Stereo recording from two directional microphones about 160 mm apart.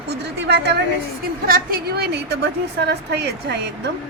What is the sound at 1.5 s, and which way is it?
A woman's voice, 70° right (ahead or behind).